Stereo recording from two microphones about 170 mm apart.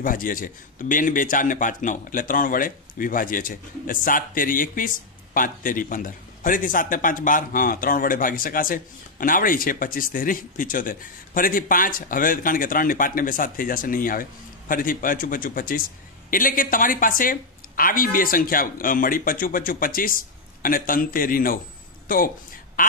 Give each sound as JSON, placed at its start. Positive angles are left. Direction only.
{"t": 0.0, "sound": "a man's voice", "side_deg": 55}
{"t": 22.8, "sound": "quack", "side_deg": 55}